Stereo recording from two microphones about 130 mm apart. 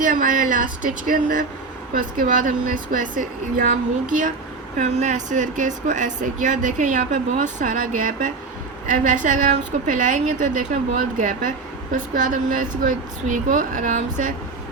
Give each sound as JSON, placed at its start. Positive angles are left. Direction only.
{"t": 0.0, "sound": "a woman's voice", "side_deg": -90}
{"t": 4.8, "sound": "speech", "side_deg": -65}
{"t": 11.2, "sound": "a woman's voice", "side_deg": -90}